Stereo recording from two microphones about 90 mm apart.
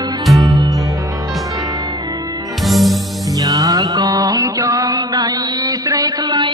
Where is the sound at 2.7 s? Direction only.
Centre (ahead or behind).